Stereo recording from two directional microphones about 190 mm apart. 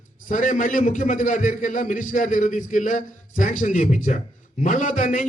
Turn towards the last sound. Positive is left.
turn(degrees=40)  # may be behind; listen again after turning